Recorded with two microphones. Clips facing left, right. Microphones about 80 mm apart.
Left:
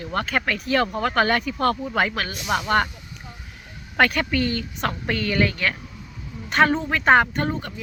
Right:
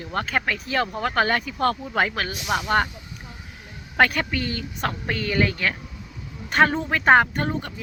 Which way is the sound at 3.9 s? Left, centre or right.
Right.